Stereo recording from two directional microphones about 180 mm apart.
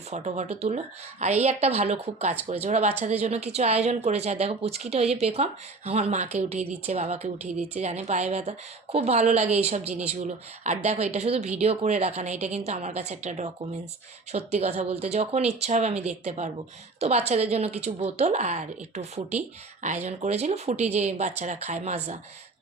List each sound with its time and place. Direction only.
0.1 s a woman's voice: 40° right (ahead or behind)